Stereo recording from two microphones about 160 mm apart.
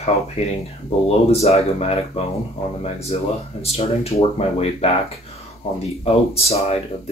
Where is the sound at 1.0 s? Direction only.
40° left (ahead or behind).